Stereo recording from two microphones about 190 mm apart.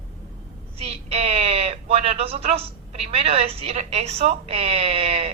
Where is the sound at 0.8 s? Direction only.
30° right (ahead or behind).